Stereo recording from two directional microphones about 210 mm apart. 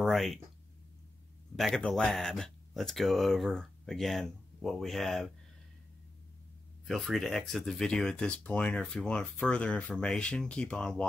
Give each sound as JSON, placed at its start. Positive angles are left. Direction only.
{"t": 0.0, "sound": "speech", "side_deg": 0}
{"t": 1.6, "sound": "speech", "side_deg": 0}
{"t": 6.9, "sound": "speech", "side_deg": 0}